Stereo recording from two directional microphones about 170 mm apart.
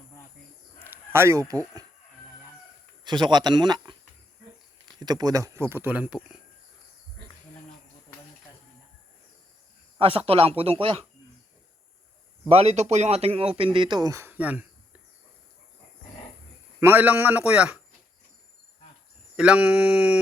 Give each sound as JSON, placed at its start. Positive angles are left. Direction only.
{"t": 0.9, "sound": "speech", "side_deg": -15}
{"t": 3.0, "sound": "speech", "side_deg": -25}
{"t": 4.9, "sound": "speech", "side_deg": -25}
{"t": 10.0, "sound": "speech", "side_deg": -35}
{"t": 12.5, "sound": "speech", "side_deg": -40}
{"t": 16.8, "sound": "speech", "side_deg": -10}
{"t": 19.4, "sound": "speech", "side_deg": -5}